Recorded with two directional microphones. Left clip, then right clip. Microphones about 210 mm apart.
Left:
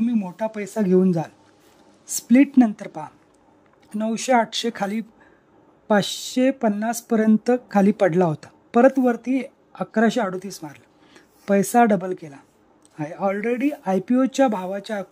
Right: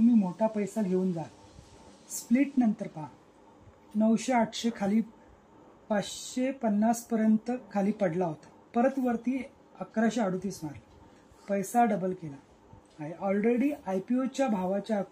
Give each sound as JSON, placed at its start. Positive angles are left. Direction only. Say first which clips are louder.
{"t": 0.2, "sound": "speech", "louder": "left 2 dB", "side_deg": 45}
{"t": 2.3, "sound": "speech", "louder": "left 11 dB", "side_deg": 45}